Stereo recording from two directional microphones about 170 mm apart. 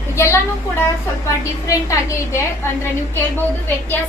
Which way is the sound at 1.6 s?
20° left (ahead or behind).